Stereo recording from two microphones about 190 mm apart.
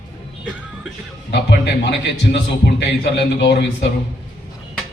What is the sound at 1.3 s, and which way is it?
A man's voice, 65° left (ahead or behind).